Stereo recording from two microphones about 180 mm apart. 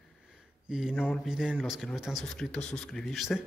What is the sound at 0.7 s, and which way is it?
Speech, 5° right (ahead or behind).